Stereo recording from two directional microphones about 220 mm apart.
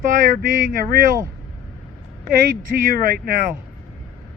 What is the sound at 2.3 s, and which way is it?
Speech, 40° right (ahead or behind).